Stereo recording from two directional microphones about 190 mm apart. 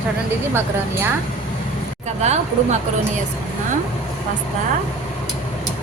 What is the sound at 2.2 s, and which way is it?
Speech, 35° right (ahead or behind).